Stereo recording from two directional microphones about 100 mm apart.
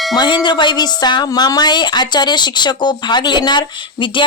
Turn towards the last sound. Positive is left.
turn(degrees=50)  # may be behind; listen again after turning